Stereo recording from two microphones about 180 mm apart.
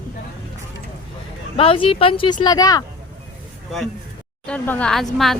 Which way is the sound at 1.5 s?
30° left (ahead or behind).